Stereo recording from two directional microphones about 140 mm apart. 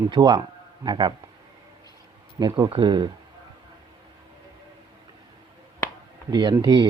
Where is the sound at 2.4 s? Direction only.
30° right (ahead or behind).